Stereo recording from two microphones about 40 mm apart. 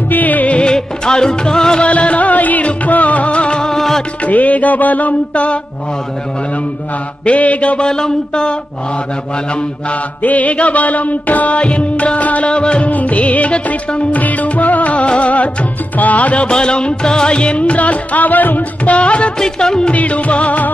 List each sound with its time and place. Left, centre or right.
0.1 s music: left
0.6 s music: left
1.9 s music: left
3.7 s music: centre
4.2 s music: left
7.2 s a sound: left
9.8 s music: left
18.9 s music: left
19.4 s a sound: centre
19.9 s music: left